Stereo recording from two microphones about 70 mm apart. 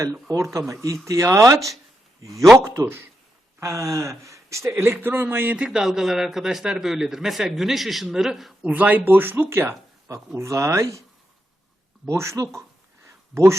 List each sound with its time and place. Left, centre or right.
0.0 s speech: right
2.3 s a man's voice: centre
2.6 s speech: right
4.9 s a man's voice: right
5.5 s a man's voice: centre
8.6 s speech: right
10.3 s speech: right
12.0 s speech: right
13.1 s a sound: right